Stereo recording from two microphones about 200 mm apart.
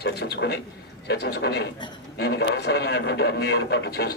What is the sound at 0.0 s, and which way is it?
A man's voice, 55° left (ahead or behind).